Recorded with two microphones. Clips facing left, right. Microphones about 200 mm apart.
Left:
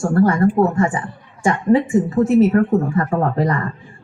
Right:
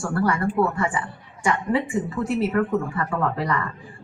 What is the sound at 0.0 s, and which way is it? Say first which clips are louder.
Speech: left 8 dB; 45° left (ahead or behind).